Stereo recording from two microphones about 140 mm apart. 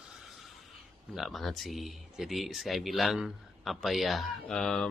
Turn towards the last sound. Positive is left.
turn(degrees=5)  # may be behind; listen again after turning